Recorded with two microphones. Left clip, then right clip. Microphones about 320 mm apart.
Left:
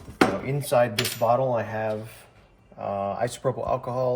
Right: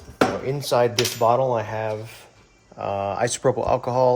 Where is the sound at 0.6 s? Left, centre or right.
Right.